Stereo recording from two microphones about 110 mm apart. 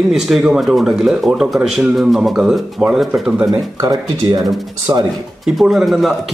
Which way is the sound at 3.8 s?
35° right (ahead or behind).